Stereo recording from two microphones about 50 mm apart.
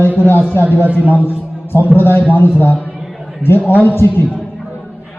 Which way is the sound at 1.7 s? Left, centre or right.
Left.